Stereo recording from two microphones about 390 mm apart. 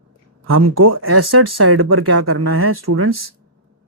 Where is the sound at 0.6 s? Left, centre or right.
Right.